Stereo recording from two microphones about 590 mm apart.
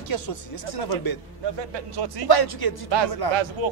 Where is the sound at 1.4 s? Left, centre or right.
Right.